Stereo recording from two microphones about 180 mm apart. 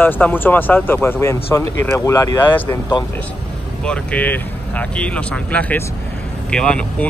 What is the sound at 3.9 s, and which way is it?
Speech, 10° left (ahead or behind).